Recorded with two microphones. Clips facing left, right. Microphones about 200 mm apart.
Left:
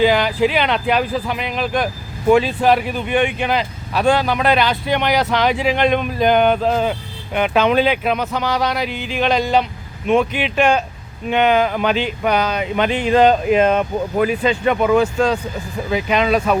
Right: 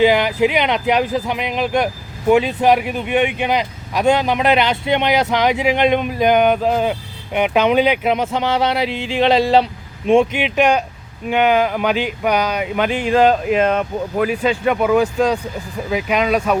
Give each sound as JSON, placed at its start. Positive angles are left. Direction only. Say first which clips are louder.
{"t": 0.0, "sound": "speech", "louder": "right 1 dB", "side_deg": -20}
{"t": 10.4, "sound": "speech", "louder": "right 1 dB", "side_deg": -15}